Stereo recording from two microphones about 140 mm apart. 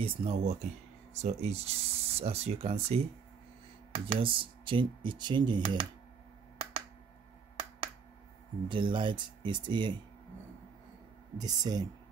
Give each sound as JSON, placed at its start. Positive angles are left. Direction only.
{"t": 0.0, "sound": "speech", "side_deg": -45}
{"t": 8.6, "sound": "speech", "side_deg": -35}
{"t": 11.3, "sound": "speech", "side_deg": -30}